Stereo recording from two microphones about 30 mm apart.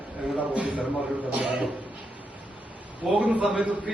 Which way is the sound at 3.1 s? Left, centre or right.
Right.